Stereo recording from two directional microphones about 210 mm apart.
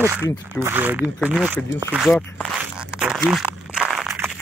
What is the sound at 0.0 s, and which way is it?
Speech, 10° right (ahead or behind).